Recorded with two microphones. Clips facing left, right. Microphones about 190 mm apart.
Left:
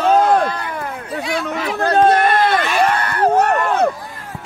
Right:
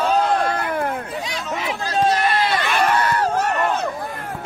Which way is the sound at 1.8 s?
60° left (ahead or behind).